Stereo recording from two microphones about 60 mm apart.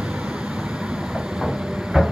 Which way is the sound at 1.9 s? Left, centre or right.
Centre.